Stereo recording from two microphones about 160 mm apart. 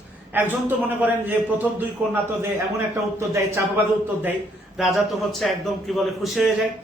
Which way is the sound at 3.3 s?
15° right (ahead or behind).